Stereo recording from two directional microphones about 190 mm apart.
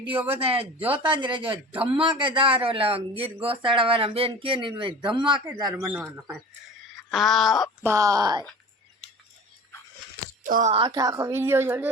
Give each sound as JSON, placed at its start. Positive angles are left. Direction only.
{"t": 0.3, "sound": "speech", "side_deg": -30}
{"t": 0.8, "sound": "speech", "side_deg": -10}
{"t": 1.0, "sound": "speech", "side_deg": -25}
{"t": 5.7, "sound": "speech", "side_deg": -5}
{"t": 7.1, "sound": "speech", "side_deg": 0}
{"t": 7.9, "sound": "speech", "side_deg": -15}
{"t": 10.4, "sound": "speech", "side_deg": -40}
{"t": 10.8, "sound": "speech", "side_deg": -25}